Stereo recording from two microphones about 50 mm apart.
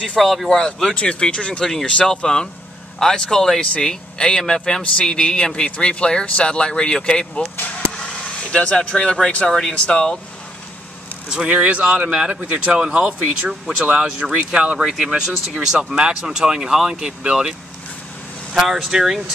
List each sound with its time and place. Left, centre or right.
0.2 s speech: centre
0.9 s speech: left
7.5 s vehicle: left
8.4 s speech: left
11.4 s a man's voice: right
12.4 s a man's voice: right
12.8 s a man's voice: centre